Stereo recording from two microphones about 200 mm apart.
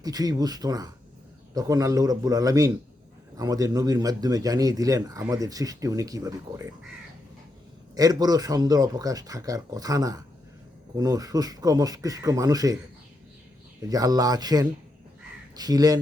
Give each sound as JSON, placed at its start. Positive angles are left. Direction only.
{"t": 0.0, "sound": "speech", "side_deg": -20}
{"t": 7.9, "sound": "speech", "side_deg": -20}
{"t": 13.8, "sound": "speech", "side_deg": -20}